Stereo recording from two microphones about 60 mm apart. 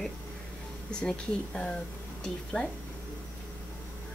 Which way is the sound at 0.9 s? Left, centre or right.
Centre.